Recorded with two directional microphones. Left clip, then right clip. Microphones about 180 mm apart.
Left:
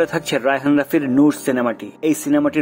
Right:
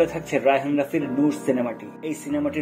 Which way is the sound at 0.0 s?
30° left (ahead or behind).